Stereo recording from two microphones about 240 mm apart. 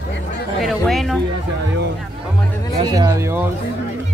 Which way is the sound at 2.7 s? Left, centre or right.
Centre.